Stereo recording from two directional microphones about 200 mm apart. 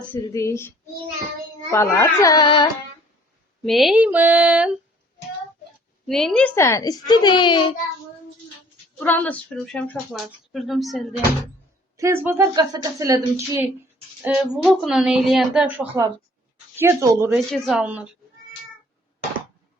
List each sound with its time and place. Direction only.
0.1 s a woman's voice: 15° left (ahead or behind)
1.7 s a woman's voice: 15° left (ahead or behind)
3.6 s a woman's voice: centre (ahead or behind)
6.1 s a woman's voice: centre (ahead or behind); by 7.7 s 25° left (ahead or behind)
9.0 s a woman's voice: 10° left (ahead or behind)
11.9 s a woman's voice: 15° right (ahead or behind)